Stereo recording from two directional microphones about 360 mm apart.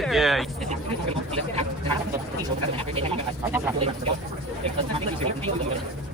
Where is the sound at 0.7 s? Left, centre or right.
Centre.